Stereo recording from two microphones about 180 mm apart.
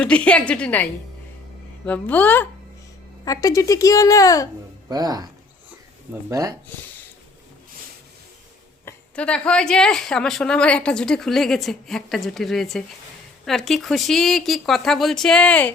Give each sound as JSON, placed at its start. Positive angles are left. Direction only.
{"t": 0.0, "sound": "a woman's voice", "side_deg": 5}
{"t": 4.9, "sound": "speech", "side_deg": -20}
{"t": 8.8, "sound": "a woman's voice", "side_deg": 10}